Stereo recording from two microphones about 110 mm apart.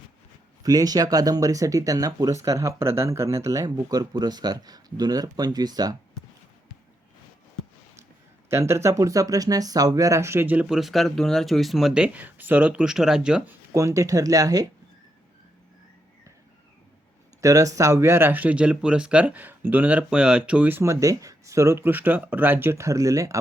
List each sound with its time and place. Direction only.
0.6 s speech: 35° right (ahead or behind)
8.4 s speech: 25° right (ahead or behind); by 13.4 s 5° right (ahead or behind)
13.5 s speech: 25° right (ahead or behind)
17.4 s speech: 30° right (ahead or behind)